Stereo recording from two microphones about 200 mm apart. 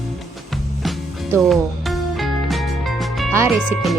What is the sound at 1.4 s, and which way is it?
Music, centre (ahead or behind).